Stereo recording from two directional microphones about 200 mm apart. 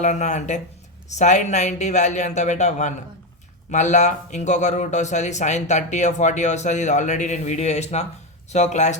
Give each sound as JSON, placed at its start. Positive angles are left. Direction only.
{"t": 0.0, "sound": "speech", "side_deg": 35}